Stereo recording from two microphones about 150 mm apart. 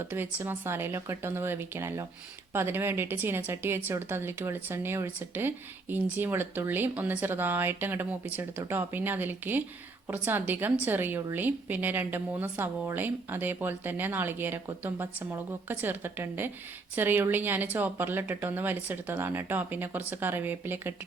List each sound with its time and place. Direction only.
0.0 s a woman's voice: 15° right (ahead or behind)